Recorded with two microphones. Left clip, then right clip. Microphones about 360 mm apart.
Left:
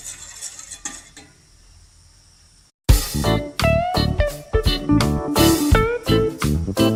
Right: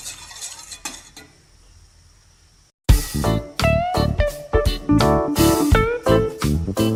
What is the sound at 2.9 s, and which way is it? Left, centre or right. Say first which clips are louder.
Music: left 2 dB; centre.